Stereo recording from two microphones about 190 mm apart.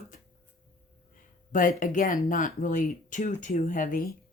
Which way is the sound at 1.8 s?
45° left (ahead or behind).